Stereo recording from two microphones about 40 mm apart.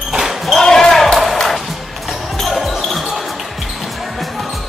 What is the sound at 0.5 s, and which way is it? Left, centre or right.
Basketball bounce, centre.